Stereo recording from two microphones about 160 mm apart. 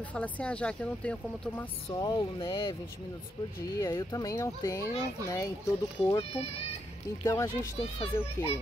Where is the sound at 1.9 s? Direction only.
25° left (ahead or behind).